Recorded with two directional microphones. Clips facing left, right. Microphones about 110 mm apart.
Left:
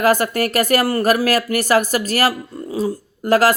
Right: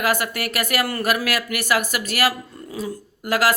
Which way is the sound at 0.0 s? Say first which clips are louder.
Left 7 dB; 40° left (ahead or behind).